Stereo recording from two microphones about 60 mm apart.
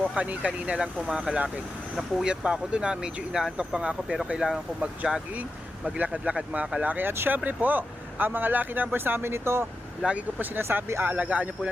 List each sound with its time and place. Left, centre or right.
0.2 s speech: right
7.3 s speech: right
10.0 s speech: right
11.0 s speech: right